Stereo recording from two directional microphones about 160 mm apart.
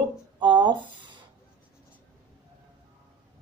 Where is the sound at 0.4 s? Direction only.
30° right (ahead or behind).